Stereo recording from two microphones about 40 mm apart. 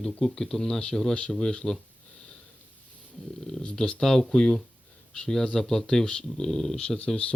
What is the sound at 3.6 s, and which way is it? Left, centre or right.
Speech, centre.